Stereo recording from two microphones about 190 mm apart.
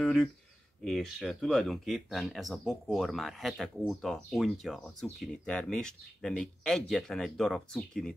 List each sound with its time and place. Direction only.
0.0 s speech: centre (ahead or behind)